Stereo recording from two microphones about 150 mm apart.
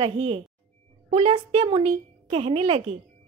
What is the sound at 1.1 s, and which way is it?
A woman's voice, 45° right (ahead or behind).